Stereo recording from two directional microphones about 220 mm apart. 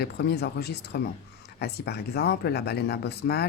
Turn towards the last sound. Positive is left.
turn(degrees=50)  # may be behind; listen again after turning